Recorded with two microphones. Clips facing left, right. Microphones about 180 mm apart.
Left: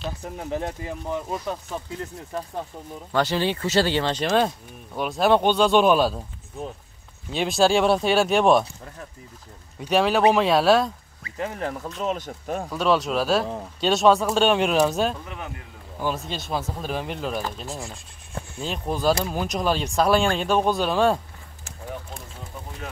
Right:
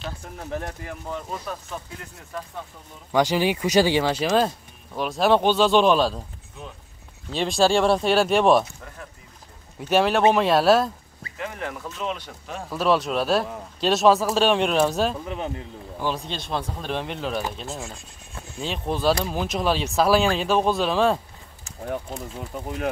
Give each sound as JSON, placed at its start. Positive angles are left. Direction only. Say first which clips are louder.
{"t": 0.4, "sound": "speech", "louder": "left 3 dB", "side_deg": 20}
{"t": 3.1, "sound": "speech", "louder": "right 2 dB", "side_deg": -10}
{"t": 7.2, "sound": "speech", "louder": "even", "side_deg": 0}
{"t": 9.8, "sound": "speech", "louder": "even", "side_deg": 0}
{"t": 11.3, "sound": "speech", "louder": "left 3 dB", "side_deg": 35}
{"t": 12.7, "sound": "speech", "louder": "right 1 dB", "side_deg": 0}
{"t": 15.2, "sound": "speech", "louder": "right 6 dB", "side_deg": -25}
{"t": 16.0, "sound": "speech", "louder": "even", "side_deg": 5}